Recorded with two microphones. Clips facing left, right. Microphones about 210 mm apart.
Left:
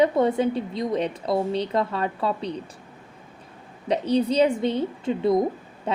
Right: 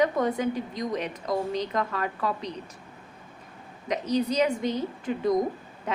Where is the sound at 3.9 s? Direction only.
30° left (ahead or behind).